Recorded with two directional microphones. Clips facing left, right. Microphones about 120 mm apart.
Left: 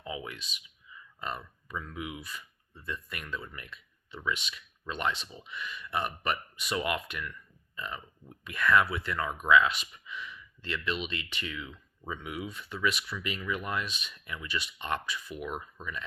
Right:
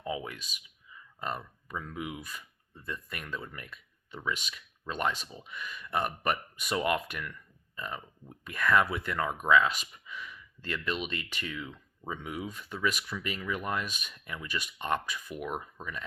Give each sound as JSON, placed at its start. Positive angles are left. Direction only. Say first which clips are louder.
{"t": 0.0, "sound": "speech", "louder": "right 3 dB", "side_deg": -40}
{"t": 3.5, "sound": "a sound", "louder": "right 1 dB", "side_deg": -45}
{"t": 4.3, "sound": "speech", "louder": "left 1 dB", "side_deg": -45}